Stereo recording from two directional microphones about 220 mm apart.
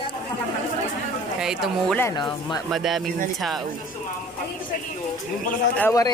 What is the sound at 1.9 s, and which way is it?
Speech, 15° left (ahead or behind).